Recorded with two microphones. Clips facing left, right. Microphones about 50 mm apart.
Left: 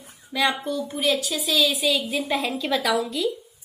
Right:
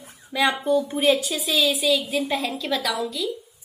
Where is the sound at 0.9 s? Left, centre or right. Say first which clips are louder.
Right 1 dB; right.